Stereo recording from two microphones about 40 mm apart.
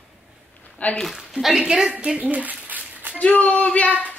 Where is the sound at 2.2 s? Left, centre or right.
Right.